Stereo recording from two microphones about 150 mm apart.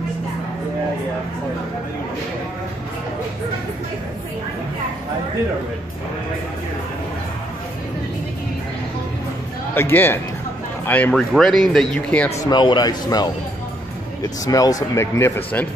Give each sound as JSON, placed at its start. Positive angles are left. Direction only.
{"t": 9.8, "sound": "speech", "side_deg": 15}
{"t": 12.4, "sound": "speech", "side_deg": 30}